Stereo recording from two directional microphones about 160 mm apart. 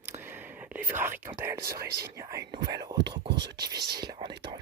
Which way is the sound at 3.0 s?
90° right.